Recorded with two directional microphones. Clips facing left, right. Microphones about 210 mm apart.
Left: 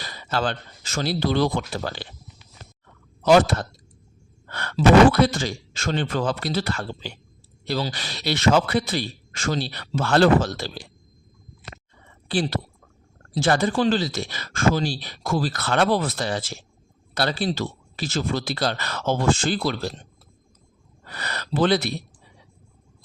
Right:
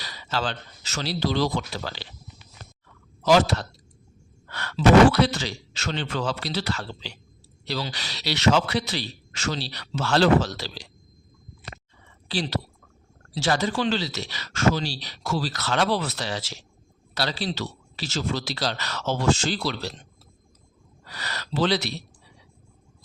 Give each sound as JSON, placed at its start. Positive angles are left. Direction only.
{"t": 0.0, "sound": "speech", "side_deg": 50}
{"t": 2.8, "sound": "a sound", "side_deg": 55}
{"t": 4.4, "sound": "a man's voice", "side_deg": 50}
{"t": 12.3, "sound": "a man's voice", "side_deg": 50}